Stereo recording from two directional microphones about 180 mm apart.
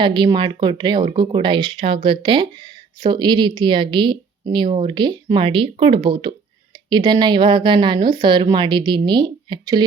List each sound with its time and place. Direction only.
0.0 s speech: 25° right (ahead or behind)